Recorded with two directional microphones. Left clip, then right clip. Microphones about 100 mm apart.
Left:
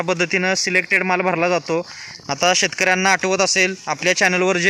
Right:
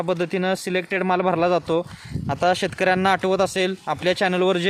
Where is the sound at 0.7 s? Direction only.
20° right (ahead or behind).